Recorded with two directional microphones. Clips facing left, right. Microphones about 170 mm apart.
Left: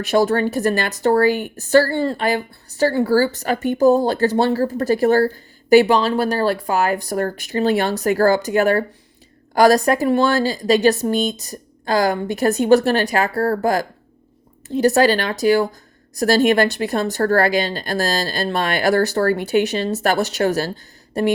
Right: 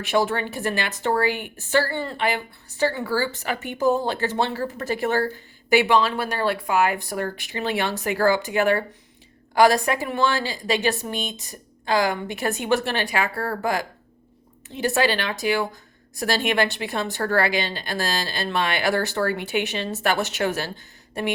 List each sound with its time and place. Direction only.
0.0 s a woman's voice: 40° left (ahead or behind)